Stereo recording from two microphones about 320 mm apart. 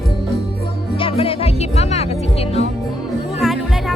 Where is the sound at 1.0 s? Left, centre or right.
Centre.